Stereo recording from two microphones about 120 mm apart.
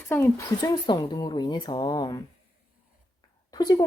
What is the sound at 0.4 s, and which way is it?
Speech, 35° left (ahead or behind).